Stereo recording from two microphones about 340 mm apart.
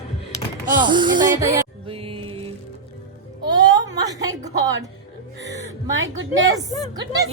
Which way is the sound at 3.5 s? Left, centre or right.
Centre.